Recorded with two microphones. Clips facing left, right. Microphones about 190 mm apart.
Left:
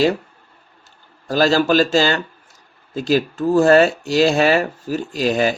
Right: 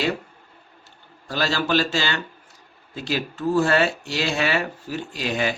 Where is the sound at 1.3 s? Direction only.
40° left (ahead or behind).